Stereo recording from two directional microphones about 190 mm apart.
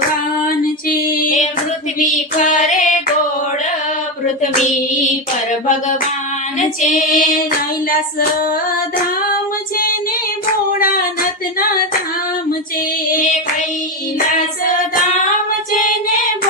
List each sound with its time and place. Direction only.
0.4 s female singing: 50° left (ahead or behind)
6.6 s female singing: 40° left (ahead or behind)
10.8 s a sound: 50° left (ahead or behind)